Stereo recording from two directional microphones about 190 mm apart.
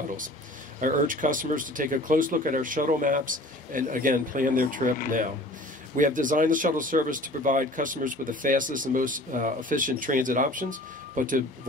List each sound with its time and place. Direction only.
0.7 s speech: 45° right (ahead or behind)
5.9 s speech: 45° right (ahead or behind)